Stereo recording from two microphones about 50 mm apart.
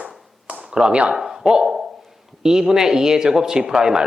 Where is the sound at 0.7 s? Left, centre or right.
Centre.